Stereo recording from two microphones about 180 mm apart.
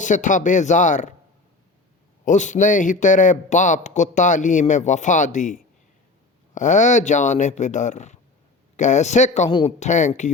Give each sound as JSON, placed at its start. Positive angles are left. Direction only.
{"t": 0.0, "sound": "a man's voice", "side_deg": 45}
{"t": 2.2, "sound": "a man's voice", "side_deg": 45}
{"t": 9.5, "sound": "a man's voice", "side_deg": 30}
{"t": 9.8, "sound": "a man's voice", "side_deg": 40}